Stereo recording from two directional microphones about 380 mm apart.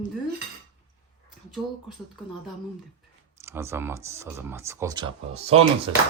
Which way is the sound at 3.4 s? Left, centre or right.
Centre.